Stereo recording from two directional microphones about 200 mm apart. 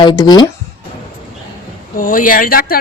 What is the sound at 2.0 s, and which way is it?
Speech, 45° left (ahead or behind).